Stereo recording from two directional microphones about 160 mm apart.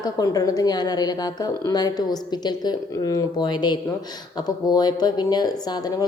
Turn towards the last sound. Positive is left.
turn(degrees=25)  # may be behind; listen again after turning